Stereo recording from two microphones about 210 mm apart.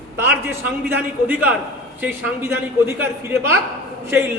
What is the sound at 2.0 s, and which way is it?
A man's voice, 10° right (ahead or behind).